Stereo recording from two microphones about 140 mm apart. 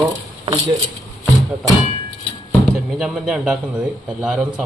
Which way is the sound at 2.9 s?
5° right (ahead or behind).